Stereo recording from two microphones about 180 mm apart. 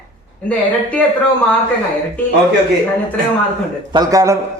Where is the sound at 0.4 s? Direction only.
5° left (ahead or behind).